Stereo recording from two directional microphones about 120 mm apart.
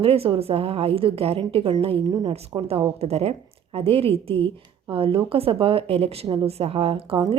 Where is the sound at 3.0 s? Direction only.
60° right (ahead or behind).